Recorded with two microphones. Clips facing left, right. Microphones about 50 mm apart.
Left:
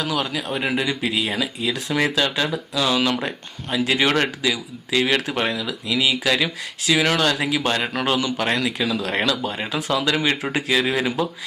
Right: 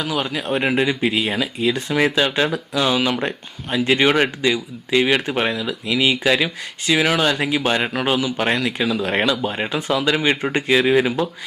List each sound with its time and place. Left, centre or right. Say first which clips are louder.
0.0 s a man's voice: right 1 dB; centre
2.1 s speech: right 3 dB; centre
3.0 s speech: right 1 dB; centre